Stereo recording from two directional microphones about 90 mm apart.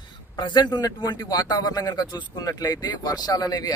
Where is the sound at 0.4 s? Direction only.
55° left (ahead or behind).